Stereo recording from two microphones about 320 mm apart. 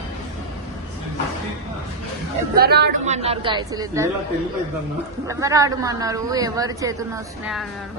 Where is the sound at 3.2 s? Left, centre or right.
Centre.